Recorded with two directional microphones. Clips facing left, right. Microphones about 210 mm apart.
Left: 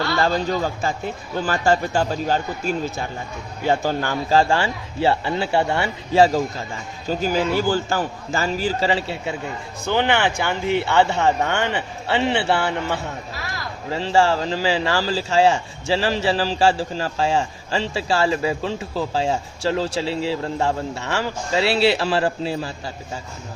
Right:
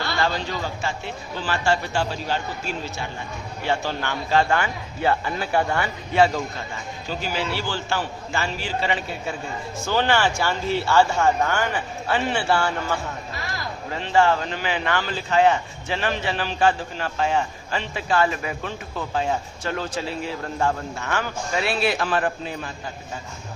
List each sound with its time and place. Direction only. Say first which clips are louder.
0.2 s a man's voice: left 4 dB; 40° left (ahead or behind)
9.8 s speech: left 2 dB; 20° left (ahead or behind)
13.9 s a man's voice: left 2 dB; 35° left (ahead or behind)